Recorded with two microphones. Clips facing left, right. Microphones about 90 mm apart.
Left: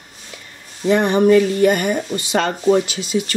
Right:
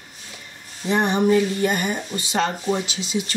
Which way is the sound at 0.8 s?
65° left (ahead or behind).